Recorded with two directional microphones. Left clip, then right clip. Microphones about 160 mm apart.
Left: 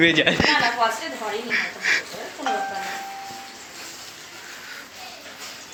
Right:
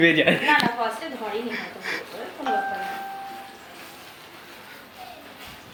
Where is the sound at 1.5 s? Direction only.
20° right (ahead or behind).